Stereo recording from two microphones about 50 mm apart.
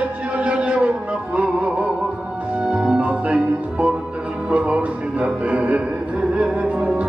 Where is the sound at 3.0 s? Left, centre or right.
Right.